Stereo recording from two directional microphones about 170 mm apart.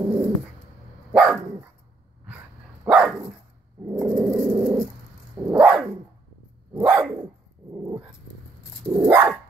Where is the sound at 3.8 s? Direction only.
20° right (ahead or behind).